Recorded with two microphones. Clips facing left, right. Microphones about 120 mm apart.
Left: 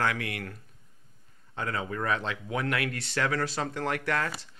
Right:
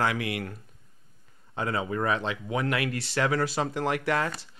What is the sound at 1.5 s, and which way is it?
Speech, 10° right (ahead or behind).